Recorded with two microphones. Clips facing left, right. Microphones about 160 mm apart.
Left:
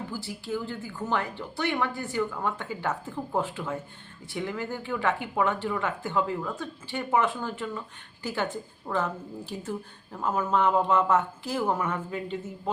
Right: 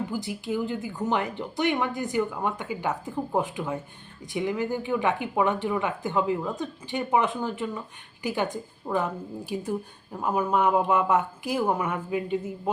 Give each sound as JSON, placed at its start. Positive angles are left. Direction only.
{"t": 0.1, "sound": "speech", "side_deg": -15}